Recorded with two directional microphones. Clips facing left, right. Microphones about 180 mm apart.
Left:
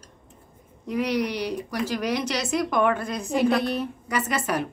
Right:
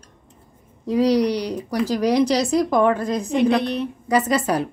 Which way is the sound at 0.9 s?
35° right (ahead or behind).